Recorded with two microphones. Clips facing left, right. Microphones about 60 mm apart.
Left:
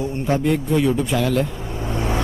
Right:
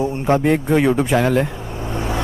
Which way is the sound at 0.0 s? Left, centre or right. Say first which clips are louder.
Right 4 dB; right.